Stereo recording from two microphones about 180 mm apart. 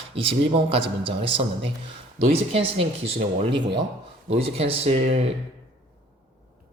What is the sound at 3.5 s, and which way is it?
Speech, 75° right (ahead or behind).